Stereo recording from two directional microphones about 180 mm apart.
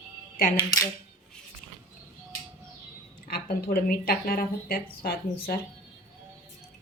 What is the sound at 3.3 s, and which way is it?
Speech, 55° left (ahead or behind).